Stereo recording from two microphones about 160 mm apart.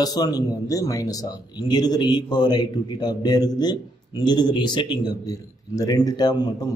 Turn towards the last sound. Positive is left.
turn(degrees=25)  # may be behind; listen again after turning